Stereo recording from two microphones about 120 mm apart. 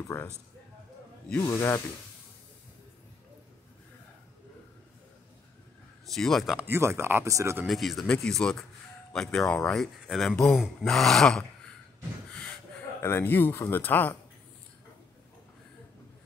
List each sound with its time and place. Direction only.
1.4 s speech: 25° left (ahead or behind)
6.0 s speech: centre (ahead or behind)
6.6 s speech: 20° right (ahead or behind)
7.6 s speech: centre (ahead or behind)
10.3 s speech: 15° left (ahead or behind)
10.6 s speech: 5° left (ahead or behind)
13.0 s speech: 20° left (ahead or behind)